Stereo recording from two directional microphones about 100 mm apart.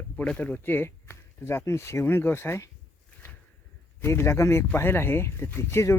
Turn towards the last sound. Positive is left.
turn(degrees=25)  # may be behind; listen again after turning